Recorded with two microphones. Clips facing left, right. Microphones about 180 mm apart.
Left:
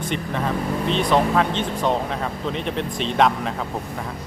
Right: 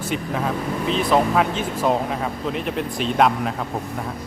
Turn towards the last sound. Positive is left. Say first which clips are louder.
# right 1 dB
turn(degrees=-5)  # may be behind; listen again after turning